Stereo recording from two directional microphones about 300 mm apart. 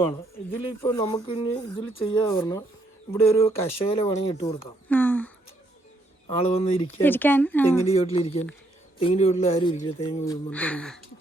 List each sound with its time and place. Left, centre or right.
0.5 s speech: centre
6.2 s speech: centre
6.8 s speech: centre
7.9 s speech: centre
10.2 s speech: centre